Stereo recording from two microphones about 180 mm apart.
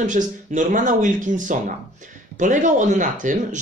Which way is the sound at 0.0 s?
45° right (ahead or behind).